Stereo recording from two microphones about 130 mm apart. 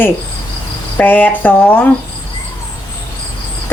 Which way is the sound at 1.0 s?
15° left (ahead or behind).